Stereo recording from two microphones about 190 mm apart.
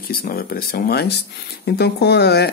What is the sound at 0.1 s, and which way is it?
Speech, 50° left (ahead or behind).